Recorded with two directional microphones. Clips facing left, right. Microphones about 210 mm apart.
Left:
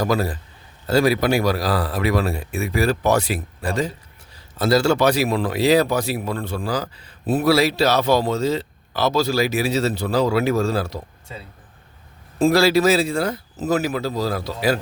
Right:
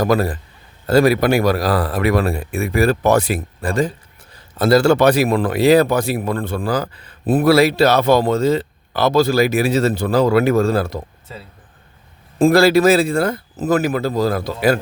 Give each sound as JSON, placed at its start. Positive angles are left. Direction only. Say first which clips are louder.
{"t": 0.0, "sound": "a man's voice", "louder": "right 4 dB", "side_deg": -55}
{"t": 12.4, "sound": "a man's voice", "louder": "right 4 dB", "side_deg": -55}